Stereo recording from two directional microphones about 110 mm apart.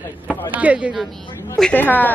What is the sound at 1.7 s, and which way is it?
Speech, 15° left (ahead or behind).